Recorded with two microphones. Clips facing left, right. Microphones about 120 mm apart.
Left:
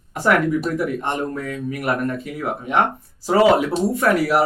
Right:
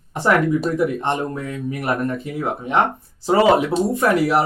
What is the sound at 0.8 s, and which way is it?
Speech, 25° right (ahead or behind).